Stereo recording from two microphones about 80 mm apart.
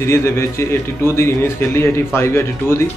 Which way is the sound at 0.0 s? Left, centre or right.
Left.